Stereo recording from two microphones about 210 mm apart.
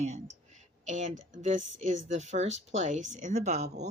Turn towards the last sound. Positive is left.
turn(degrees=-35)  # may be behind; listen again after turning